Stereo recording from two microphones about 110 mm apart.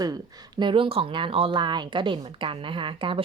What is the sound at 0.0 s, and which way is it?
Speech, 35° right (ahead or behind).